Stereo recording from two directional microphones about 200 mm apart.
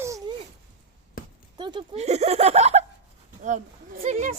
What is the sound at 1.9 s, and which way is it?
Speech, 35° right (ahead or behind).